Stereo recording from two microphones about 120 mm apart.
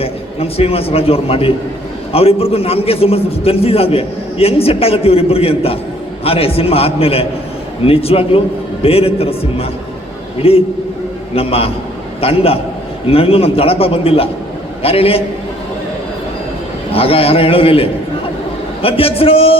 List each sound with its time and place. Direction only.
0.0 s a man's voice: 55° left (ahead or behind)
16.9 s a man's voice: 55° left (ahead or behind)